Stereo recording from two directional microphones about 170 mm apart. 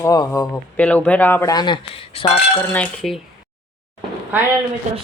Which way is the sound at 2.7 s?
5° left (ahead or behind).